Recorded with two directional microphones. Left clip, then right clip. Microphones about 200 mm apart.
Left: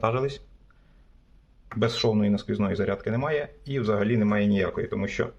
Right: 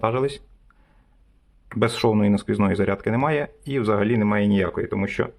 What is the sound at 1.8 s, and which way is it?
Speech, 30° right (ahead or behind).